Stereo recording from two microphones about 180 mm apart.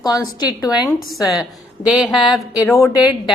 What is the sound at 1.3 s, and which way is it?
Speech, 5° right (ahead or behind).